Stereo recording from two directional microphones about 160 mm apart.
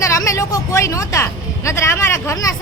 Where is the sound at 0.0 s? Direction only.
20° left (ahead or behind).